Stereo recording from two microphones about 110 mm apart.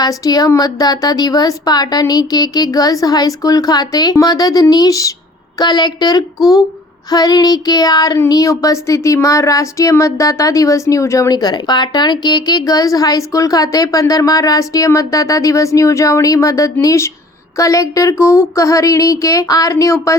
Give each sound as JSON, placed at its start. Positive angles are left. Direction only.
{"t": 0.0, "sound": "speech", "side_deg": 35}